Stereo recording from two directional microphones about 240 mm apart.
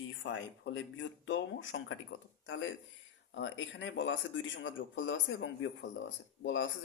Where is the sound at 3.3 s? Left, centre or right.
Left.